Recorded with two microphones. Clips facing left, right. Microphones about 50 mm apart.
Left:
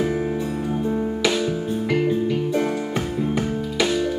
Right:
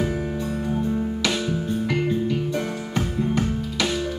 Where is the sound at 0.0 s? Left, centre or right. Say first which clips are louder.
Left 3 dB; centre.